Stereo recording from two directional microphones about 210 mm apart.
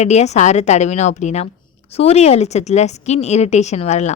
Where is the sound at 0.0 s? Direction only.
30° left (ahead or behind).